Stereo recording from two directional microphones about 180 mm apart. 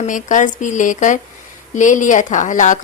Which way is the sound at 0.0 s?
45° left (ahead or behind).